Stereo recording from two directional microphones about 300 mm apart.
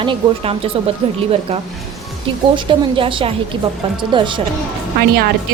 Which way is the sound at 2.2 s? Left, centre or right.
Centre.